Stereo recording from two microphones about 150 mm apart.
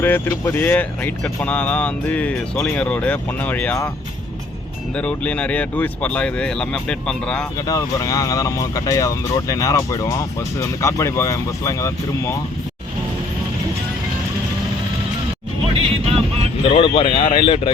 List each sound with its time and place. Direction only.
0.0 s speech: 15° left (ahead or behind)
4.9 s speech: 10° left (ahead or behind)
7.7 s speech: 25° left (ahead or behind)
15.8 s music: 40° right (ahead or behind)
16.6 s speech: 35° left (ahead or behind)